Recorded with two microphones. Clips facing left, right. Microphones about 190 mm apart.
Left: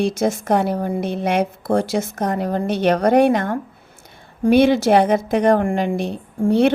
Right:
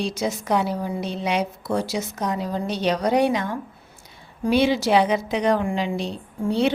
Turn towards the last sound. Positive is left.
turn(degrees=50)  # may be behind; listen again after turning